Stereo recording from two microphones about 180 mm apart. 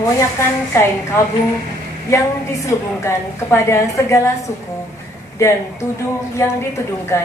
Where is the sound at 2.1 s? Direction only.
15° left (ahead or behind).